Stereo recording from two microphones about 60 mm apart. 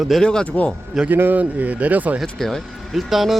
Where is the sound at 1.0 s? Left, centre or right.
Right.